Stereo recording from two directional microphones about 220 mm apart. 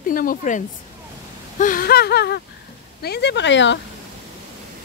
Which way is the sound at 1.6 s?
40° left (ahead or behind).